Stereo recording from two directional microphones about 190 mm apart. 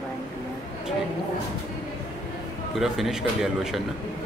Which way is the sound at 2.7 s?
Centre (ahead or behind).